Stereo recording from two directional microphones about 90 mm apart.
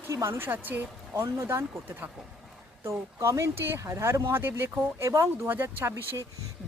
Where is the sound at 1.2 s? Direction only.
30° right (ahead or behind).